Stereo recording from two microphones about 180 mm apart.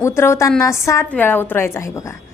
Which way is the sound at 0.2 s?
15° left (ahead or behind).